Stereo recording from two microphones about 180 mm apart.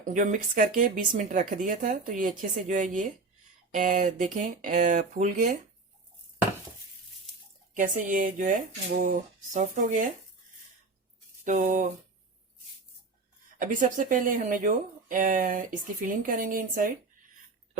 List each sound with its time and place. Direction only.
0.1 s speech: 45° right (ahead or behind)
7.7 s speech: 45° right (ahead or behind)
11.4 s speech: 45° right (ahead or behind)
13.6 s speech: 45° right (ahead or behind)